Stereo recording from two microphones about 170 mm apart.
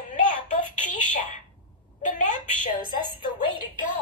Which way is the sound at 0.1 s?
45° left (ahead or behind).